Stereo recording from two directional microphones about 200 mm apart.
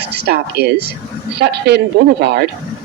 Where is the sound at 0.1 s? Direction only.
55° right (ahead or behind).